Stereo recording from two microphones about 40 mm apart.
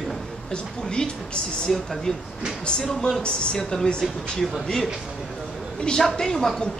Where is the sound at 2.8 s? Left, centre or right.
Centre.